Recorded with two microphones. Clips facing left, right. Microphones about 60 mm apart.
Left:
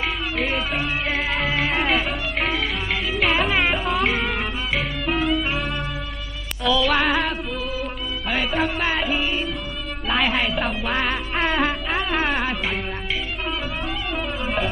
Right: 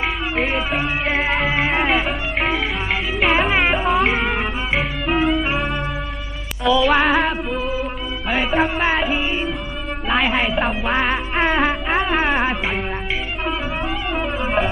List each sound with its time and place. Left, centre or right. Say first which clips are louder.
0.5 s speech: right 3 dB; centre
1.0 s music: right 4 dB; right
1.5 s music: right 3 dB; centre
8.5 s music: right 5 dB; centre
14.4 s music: right 5 dB; centre